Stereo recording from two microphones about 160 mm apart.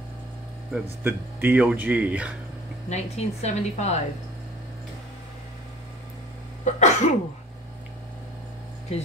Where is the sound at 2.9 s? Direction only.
45° left (ahead or behind).